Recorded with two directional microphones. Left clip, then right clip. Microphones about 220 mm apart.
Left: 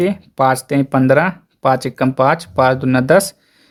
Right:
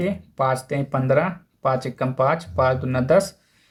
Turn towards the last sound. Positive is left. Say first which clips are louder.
# left 6 dB
turn(degrees=50)  # may be behind; listen again after turning